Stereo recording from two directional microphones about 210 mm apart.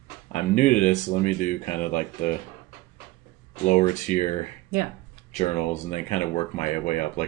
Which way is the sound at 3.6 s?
35° left (ahead or behind).